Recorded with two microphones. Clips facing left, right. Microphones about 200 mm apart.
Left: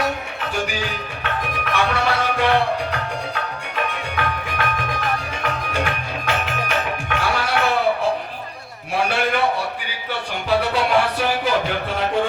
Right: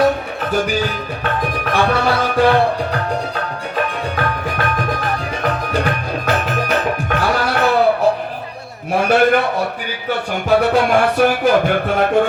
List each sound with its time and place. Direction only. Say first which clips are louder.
1.2 s music: right 5 dB; 35° right (ahead or behind)
8.9 s a sound: right 8 dB; 45° right (ahead or behind)
10.5 s music: right 5 dB; 50° right (ahead or behind)